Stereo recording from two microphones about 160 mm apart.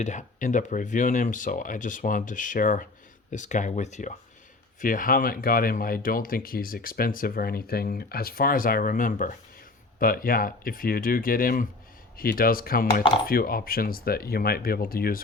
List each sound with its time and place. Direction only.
0.0 s speech: 50° left (ahead or behind)
4.8 s speech: 60° left (ahead or behind)